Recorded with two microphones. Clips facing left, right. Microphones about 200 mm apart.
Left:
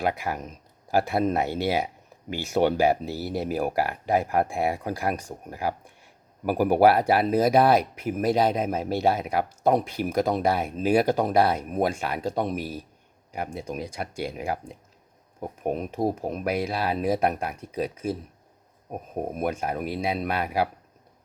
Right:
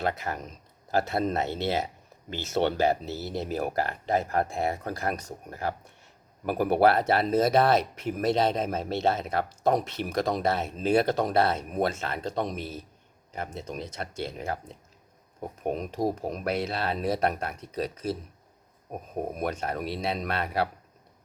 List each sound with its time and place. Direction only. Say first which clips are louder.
0.0 s speech: left 3 dB; 10° left (ahead or behind)
3.1 s speech: left 3 dB; 20° right (ahead or behind)
3.3 s speech: left 3 dB; 10° left (ahead or behind)
15.6 s speech: left 2 dB; 5° left (ahead or behind)
19.5 s speech: left 3 dB; 10° left (ahead or behind)